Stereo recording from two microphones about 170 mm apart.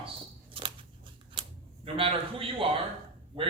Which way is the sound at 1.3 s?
30° right (ahead or behind).